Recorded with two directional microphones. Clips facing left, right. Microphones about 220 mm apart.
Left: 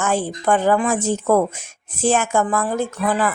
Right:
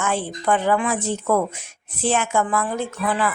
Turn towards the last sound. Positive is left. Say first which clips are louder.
# left 3 dB
turn(degrees=40)  # may be behind; listen again after turning